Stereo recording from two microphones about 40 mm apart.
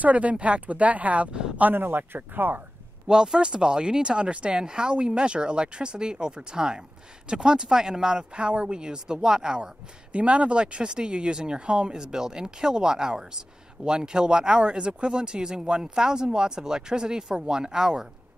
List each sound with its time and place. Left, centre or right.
0.0 s speech: right
1.6 s speech: right
3.1 s speech: centre
10.1 s speech: right; by 18.0 s centre